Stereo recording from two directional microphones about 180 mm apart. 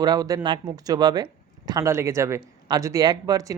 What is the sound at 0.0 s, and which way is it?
Speech, 20° right (ahead or behind).